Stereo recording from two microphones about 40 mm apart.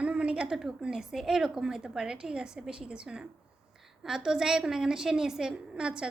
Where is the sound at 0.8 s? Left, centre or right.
Centre.